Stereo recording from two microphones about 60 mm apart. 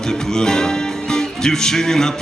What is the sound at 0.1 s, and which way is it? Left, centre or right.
Speech, centre.